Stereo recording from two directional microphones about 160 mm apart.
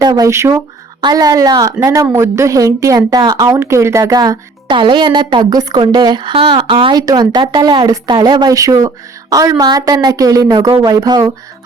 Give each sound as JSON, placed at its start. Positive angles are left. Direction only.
{"t": 0.0, "sound": "a woman's voice", "side_deg": -20}